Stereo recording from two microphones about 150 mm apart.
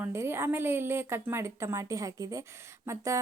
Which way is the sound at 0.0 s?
15° right (ahead or behind).